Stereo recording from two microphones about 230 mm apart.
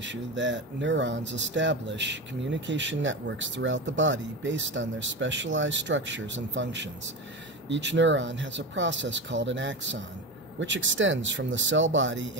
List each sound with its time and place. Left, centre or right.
0.0 s speech: right